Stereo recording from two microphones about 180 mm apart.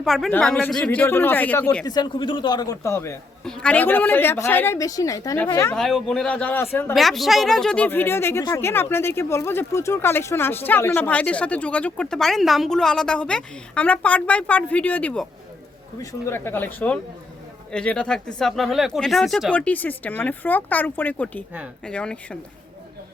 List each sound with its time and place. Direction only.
0.0 s a woman's voice: centre (ahead or behind)
3.4 s a woman's voice: 5° left (ahead or behind)
5.7 s a woman's voice: centre (ahead or behind)
6.9 s a woman's voice: centre (ahead or behind)